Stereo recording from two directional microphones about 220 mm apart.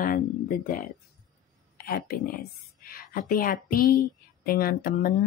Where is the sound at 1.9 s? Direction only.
45° left (ahead or behind).